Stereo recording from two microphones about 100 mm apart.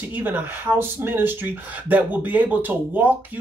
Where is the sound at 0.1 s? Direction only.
20° right (ahead or behind).